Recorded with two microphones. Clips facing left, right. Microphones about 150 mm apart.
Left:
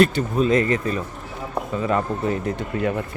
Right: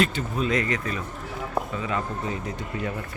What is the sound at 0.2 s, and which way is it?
Speech, 40° left (ahead or behind).